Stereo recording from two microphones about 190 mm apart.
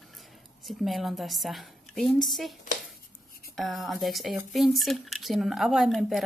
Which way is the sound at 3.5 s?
Centre (ahead or behind).